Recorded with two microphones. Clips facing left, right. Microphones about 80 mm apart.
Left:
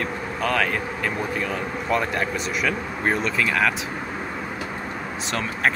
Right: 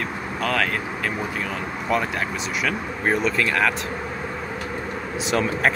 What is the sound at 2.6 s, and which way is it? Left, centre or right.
Speech, centre.